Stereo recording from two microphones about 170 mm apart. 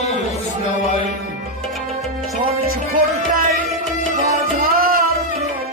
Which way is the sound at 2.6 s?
60° right (ahead or behind).